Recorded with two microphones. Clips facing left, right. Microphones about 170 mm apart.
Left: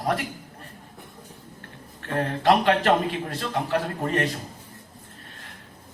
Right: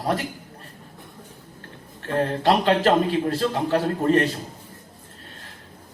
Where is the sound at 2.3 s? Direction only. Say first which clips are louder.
Left 1 dB; 30° right (ahead or behind).